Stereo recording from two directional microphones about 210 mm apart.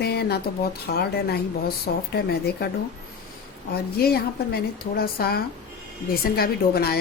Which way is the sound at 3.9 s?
45° left (ahead or behind).